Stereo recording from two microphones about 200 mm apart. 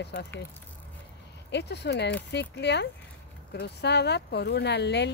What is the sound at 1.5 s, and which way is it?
Speech, 55° left (ahead or behind).